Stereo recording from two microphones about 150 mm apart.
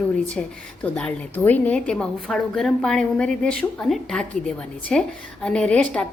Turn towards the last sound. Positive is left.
turn(degrees=10)  # may be behind; listen again after turning